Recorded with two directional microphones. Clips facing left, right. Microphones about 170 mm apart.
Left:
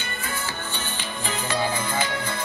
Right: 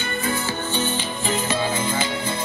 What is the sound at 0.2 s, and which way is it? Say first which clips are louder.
Music: right 7 dB; 25° right (ahead or behind).